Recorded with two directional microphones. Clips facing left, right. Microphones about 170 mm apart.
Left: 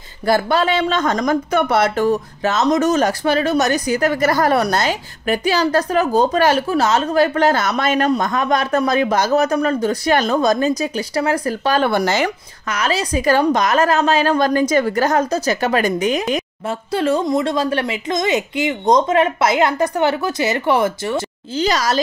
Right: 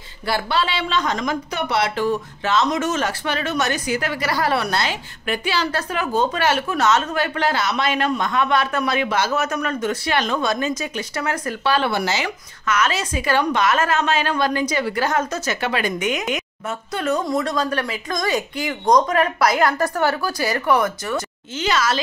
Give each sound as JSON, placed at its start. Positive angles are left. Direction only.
{"t": 0.3, "sound": "speech", "side_deg": 45}
{"t": 12.6, "sound": "speech", "side_deg": 35}
{"t": 21.6, "sound": "speech", "side_deg": 40}